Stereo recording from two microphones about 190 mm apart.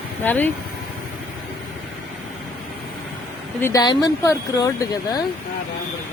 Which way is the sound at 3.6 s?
15° left (ahead or behind).